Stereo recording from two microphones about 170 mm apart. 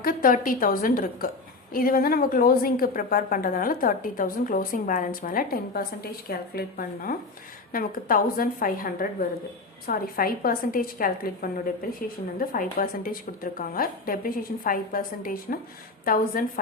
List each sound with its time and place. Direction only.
0.0 s a woman's voice: 55° left (ahead or behind)